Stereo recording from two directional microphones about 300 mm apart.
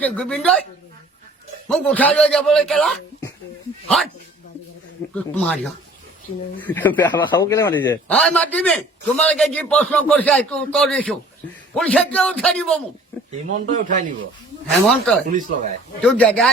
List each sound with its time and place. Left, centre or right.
0.0 s a man's voice: centre
1.6 s a man's voice: centre
5.1 s a man's voice: centre
13.7 s speech: right
14.8 s a man's voice: centre
15.3 s speech: right
16.0 s a man's voice: centre